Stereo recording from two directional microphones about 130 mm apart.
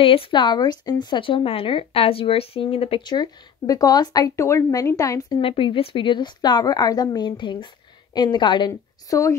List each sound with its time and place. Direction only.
0.0 s speech: 45° left (ahead or behind); by 5.4 s 25° left (ahead or behind)
5.4 s speech: 45° left (ahead or behind)